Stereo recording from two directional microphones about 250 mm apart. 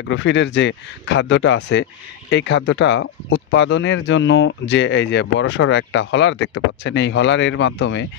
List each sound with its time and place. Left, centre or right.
0.1 s speech: left